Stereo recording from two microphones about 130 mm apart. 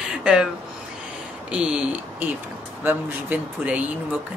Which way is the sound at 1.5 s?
10° right (ahead or behind).